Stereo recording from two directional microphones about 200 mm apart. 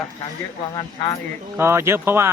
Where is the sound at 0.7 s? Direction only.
20° left (ahead or behind).